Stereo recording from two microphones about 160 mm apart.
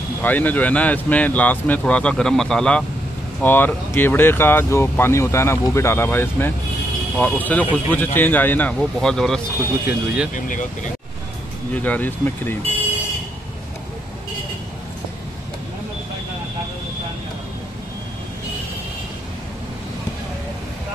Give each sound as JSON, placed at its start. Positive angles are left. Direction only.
{"t": 0.2, "sound": "speech", "side_deg": 10}
{"t": 10.3, "sound": "speech", "side_deg": 55}
{"t": 11.7, "sound": "speech", "side_deg": 10}